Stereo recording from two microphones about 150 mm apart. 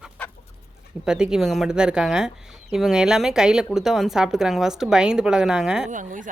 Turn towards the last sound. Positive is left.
turn(degrees=-60)  # may be behind; listen again after turning